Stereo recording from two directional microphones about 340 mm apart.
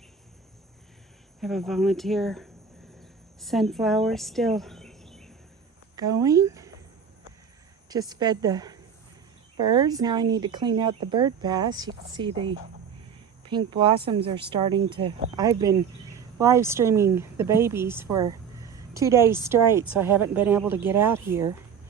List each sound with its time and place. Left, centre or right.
1.4 s speech: centre
6.0 s speech: centre
7.9 s speech: centre